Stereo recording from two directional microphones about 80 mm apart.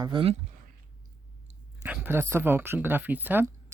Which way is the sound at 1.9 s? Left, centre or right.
Right.